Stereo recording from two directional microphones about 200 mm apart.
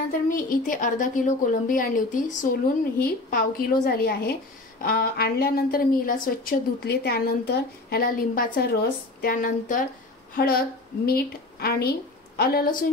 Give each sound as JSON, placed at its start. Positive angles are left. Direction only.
{"t": 0.1, "sound": "a woman's voice", "side_deg": 45}